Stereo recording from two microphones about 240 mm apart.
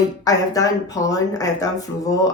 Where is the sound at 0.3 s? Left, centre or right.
Centre.